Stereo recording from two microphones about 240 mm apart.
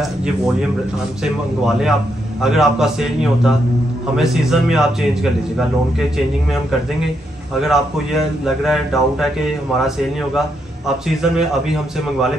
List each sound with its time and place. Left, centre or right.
1.2 s a man's voice: centre